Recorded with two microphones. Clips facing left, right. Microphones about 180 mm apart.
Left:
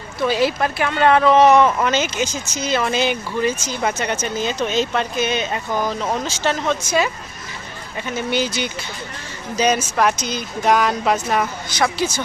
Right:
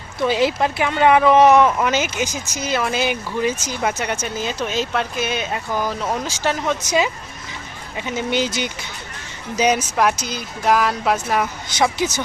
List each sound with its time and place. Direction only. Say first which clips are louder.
0.2 s speech: even; 20° right (ahead or behind)
11.8 s speech: right 1 dB; 20° right (ahead or behind)